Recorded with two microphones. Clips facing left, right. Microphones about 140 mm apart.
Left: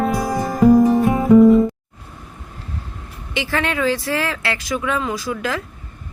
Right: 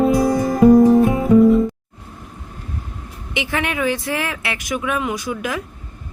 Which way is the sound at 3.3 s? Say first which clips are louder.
Left 1 dB; 15° right (ahead or behind).